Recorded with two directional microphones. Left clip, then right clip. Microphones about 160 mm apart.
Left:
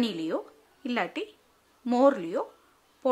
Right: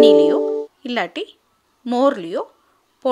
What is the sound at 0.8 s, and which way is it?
A woman's voice, 25° right (ahead or behind).